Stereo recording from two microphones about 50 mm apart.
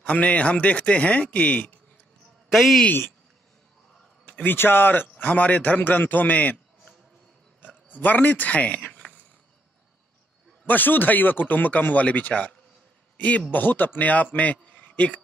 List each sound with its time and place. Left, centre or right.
0.0 s speech: left
2.5 s speech: centre
4.4 s speech: left
5.1 s a man's voice: left
10.7 s speech: left
13.5 s speech: left